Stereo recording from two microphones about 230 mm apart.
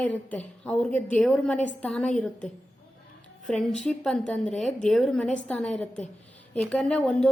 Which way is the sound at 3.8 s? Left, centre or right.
Centre.